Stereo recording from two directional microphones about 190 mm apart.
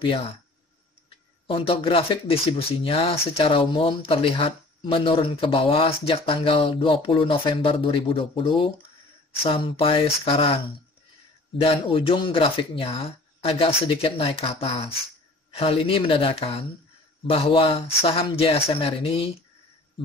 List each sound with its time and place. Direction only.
1.5 s speech: 30° left (ahead or behind)
11.6 s speech: 30° left (ahead or behind)